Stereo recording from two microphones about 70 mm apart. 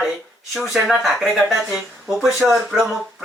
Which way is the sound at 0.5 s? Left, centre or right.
Centre.